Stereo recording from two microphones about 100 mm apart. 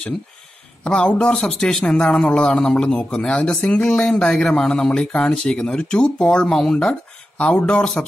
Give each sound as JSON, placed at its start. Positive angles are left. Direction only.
{"t": 0.8, "sound": "speech", "side_deg": 10}